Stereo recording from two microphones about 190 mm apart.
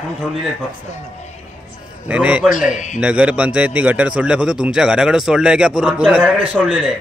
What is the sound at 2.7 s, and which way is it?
Speech, 40° left (ahead or behind).